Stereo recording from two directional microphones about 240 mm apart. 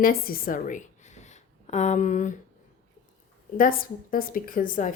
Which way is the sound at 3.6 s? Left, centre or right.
Left.